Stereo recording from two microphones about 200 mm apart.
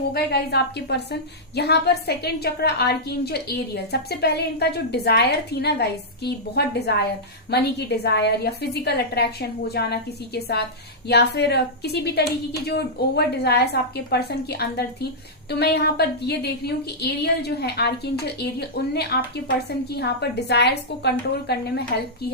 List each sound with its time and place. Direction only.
0.1 s a woman's voice: 55° left (ahead or behind)